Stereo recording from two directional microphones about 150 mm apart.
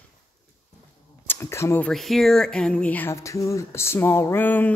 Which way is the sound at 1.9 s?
Centre (ahead or behind).